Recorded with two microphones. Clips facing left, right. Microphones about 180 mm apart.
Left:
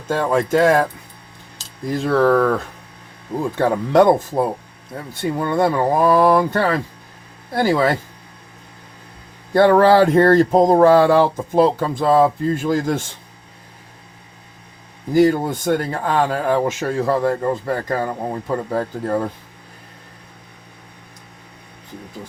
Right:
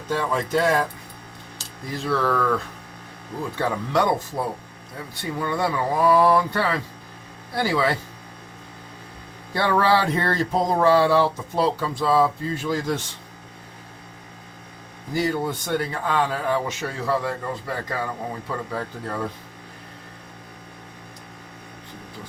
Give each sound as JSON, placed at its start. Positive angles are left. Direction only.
{"t": 0.1, "sound": "speech", "side_deg": 50}
{"t": 1.9, "sound": "speech", "side_deg": 50}
{"t": 3.6, "sound": "speech", "side_deg": 50}
{"t": 5.4, "sound": "speech", "side_deg": 50}
{"t": 9.6, "sound": "speech", "side_deg": 50}
{"t": 15.1, "sound": "speech", "side_deg": 50}